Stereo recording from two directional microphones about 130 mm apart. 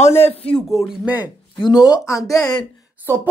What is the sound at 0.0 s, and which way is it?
Speech, 55° left (ahead or behind).